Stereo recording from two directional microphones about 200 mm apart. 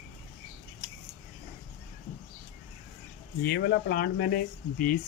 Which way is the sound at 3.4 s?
55° left (ahead or behind).